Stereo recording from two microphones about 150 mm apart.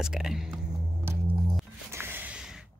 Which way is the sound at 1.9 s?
15° right (ahead or behind).